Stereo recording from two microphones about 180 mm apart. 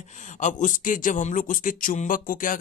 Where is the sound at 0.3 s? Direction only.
45° left (ahead or behind).